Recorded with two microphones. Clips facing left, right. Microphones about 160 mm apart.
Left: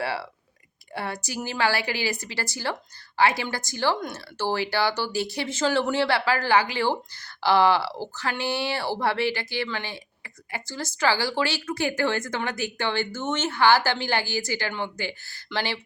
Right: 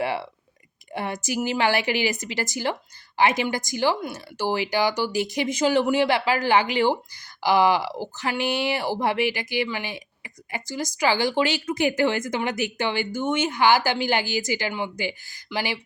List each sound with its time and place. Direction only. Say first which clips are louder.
0.0 s a woman's voice: right 3 dB; 20° right (ahead or behind)